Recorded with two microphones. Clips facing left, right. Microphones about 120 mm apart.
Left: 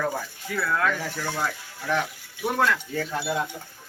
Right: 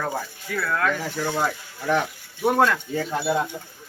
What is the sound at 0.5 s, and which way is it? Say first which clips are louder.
Speech: right 1 dB; 10° left (ahead or behind).